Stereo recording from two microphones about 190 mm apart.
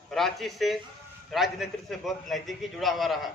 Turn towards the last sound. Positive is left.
turn(degrees=0)  # may be behind; listen again after turning